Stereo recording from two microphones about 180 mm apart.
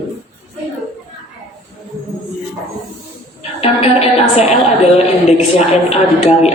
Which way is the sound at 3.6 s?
35° left (ahead or behind).